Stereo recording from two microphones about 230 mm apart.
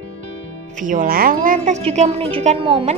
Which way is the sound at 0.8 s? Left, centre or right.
Right.